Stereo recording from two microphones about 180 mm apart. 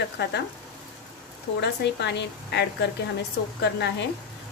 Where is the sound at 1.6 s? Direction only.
75° left (ahead or behind).